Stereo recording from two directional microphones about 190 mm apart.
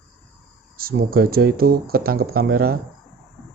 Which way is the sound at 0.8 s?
50° right (ahead or behind).